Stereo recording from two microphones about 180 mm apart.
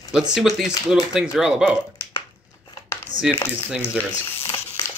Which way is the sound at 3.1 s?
40° left (ahead or behind).